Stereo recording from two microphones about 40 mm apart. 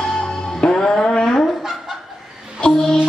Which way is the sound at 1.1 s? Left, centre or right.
Centre.